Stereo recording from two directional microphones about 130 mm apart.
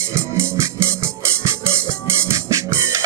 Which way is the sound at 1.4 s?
20° right (ahead or behind).